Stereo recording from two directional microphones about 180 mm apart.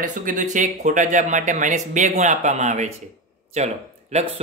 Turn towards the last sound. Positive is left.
turn(degrees=-40)  # may be behind; listen again after turning